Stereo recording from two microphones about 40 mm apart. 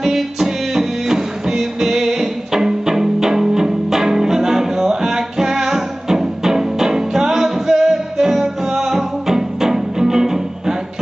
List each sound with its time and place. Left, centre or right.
0.0 s music: centre